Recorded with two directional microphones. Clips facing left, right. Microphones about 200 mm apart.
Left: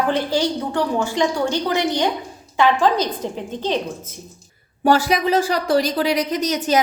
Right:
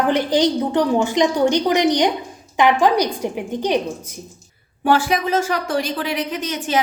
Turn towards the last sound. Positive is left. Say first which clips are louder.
# left 4 dB
turn(degrees=40)  # may be behind; listen again after turning